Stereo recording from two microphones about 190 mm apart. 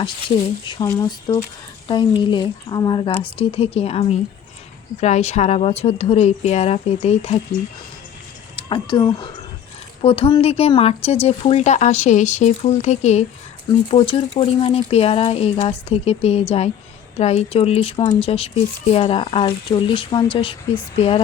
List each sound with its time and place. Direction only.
0.6 s speech: 25° left (ahead or behind)
8.5 s speech: 25° left (ahead or behind)